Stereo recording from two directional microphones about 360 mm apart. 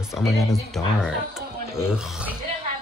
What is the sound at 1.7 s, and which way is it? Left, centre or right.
Speech, centre.